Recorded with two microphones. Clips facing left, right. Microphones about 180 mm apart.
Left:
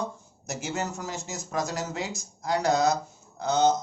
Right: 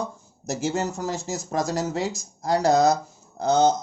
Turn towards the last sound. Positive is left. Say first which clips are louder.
# right 3 dB
turn(degrees=-35)  # may be behind; listen again after turning